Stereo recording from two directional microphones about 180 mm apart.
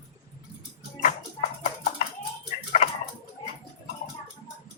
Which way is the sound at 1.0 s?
40° left (ahead or behind).